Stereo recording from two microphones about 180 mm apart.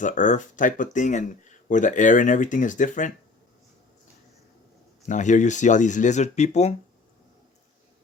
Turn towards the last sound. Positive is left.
turn(degrees=40)  # may be behind; listen again after turning